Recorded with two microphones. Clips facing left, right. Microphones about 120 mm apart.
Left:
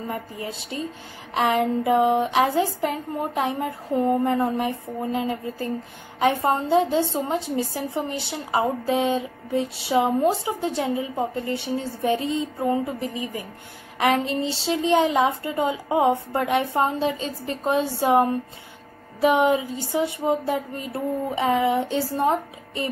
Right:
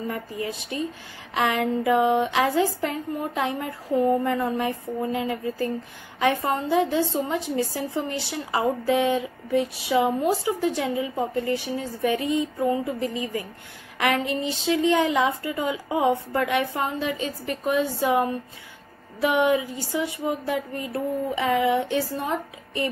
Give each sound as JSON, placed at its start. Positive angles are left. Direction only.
{"t": 0.4, "sound": "a woman's voice", "side_deg": 25}
{"t": 13.9, "sound": "a woman's voice", "side_deg": 25}